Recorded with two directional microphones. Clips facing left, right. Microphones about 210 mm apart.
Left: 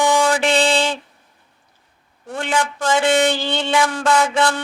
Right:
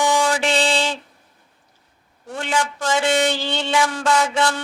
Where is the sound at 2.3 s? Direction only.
55° left (ahead or behind).